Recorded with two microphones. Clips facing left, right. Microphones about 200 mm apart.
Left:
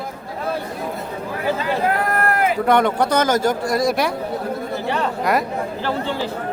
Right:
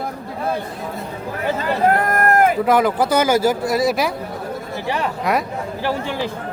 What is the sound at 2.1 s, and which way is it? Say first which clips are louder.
Run: right 4 dB; 45° right (ahead or behind).